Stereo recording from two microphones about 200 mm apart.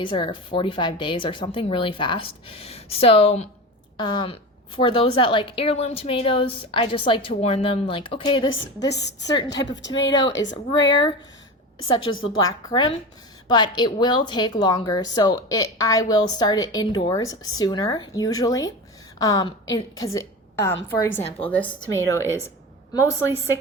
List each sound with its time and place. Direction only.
0.0 s speech: 25° left (ahead or behind)
8.9 s a woman's voice: 60° left (ahead or behind)
9.2 s speech: 20° left (ahead or behind)
9.6 s a woman's voice: 65° left (ahead or behind)
10.1 s speech: 20° left (ahead or behind)
11.9 s a woman's voice: 80° left
12.6 s speech: 20° left (ahead or behind)
21.4 s speech: 5° left (ahead or behind)